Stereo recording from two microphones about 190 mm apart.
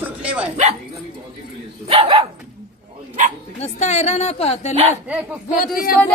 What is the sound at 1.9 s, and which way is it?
Speech, 30° right (ahead or behind).